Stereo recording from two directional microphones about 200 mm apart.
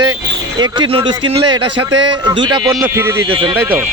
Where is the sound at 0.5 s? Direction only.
20° right (ahead or behind).